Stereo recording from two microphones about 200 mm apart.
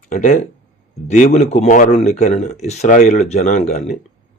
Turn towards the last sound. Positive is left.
turn(degrees=35)  # may be behind; listen again after turning